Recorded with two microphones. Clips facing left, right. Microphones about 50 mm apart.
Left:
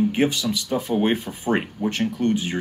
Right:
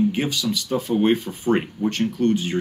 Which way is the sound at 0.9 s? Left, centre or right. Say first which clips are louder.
Right 3 dB; centre.